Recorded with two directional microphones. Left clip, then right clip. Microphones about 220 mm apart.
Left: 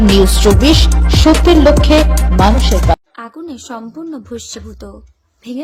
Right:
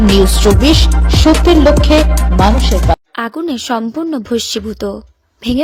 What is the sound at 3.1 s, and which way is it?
Speech, 40° right (ahead or behind).